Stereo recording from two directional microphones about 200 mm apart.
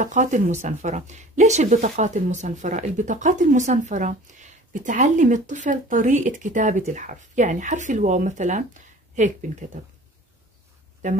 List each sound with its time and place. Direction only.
0.0 s speech: 40° right (ahead or behind)